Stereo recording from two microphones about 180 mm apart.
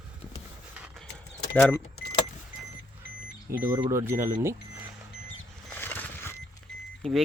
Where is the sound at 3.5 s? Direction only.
15° right (ahead or behind).